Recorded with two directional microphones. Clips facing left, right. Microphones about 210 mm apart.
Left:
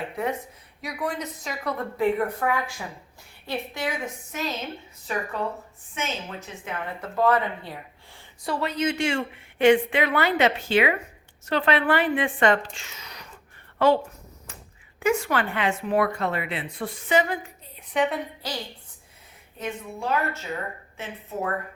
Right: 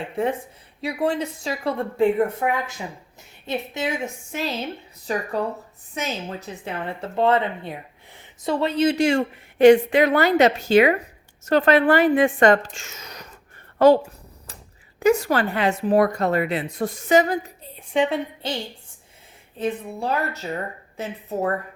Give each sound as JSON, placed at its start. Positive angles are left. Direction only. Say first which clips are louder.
{"t": 0.8, "sound": "a woman's voice", "louder": "right 7 dB", "side_deg": -30}
{"t": 19.5, "sound": "a woman's voice", "louder": "right 6 dB", "side_deg": -35}